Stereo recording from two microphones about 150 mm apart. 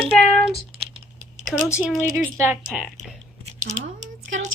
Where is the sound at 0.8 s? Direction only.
50° right (ahead or behind).